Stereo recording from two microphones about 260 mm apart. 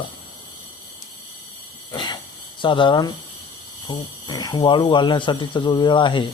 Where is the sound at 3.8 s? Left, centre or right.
Centre.